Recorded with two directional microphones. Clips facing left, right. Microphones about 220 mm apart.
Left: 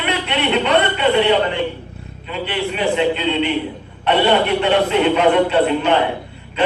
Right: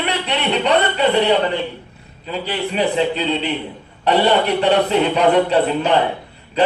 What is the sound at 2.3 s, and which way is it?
A man's voice, 35° right (ahead or behind).